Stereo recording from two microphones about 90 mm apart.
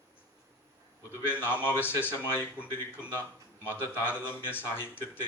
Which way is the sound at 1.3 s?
25° left (ahead or behind).